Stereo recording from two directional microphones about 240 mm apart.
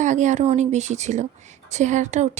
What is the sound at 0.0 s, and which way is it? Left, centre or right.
Speech, right.